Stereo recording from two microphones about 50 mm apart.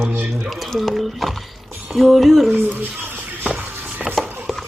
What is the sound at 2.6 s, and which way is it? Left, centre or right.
Speech, right.